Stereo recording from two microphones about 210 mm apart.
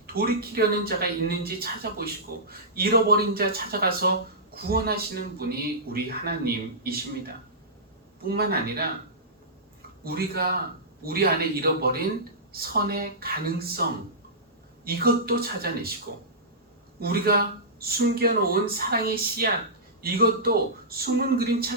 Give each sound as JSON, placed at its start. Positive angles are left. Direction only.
{"t": 0.1, "sound": "a man's voice", "side_deg": -45}
{"t": 10.0, "sound": "a man's voice", "side_deg": -45}
{"t": 14.8, "sound": "a man's voice", "side_deg": -45}
{"t": 17.0, "sound": "a man's voice", "side_deg": -45}